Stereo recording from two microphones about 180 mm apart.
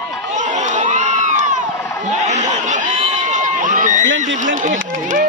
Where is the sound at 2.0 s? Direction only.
40° right (ahead or behind).